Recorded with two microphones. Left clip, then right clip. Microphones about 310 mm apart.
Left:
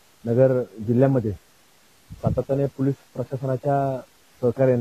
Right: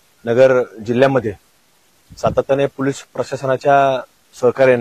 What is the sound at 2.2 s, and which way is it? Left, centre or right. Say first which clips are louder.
Speech: right 9 dB; centre.